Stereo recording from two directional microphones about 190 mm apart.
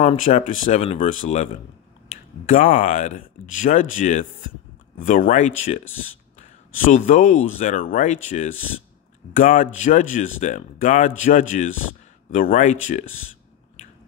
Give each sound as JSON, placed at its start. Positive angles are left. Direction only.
{"t": 0.0, "sound": "speech", "side_deg": 40}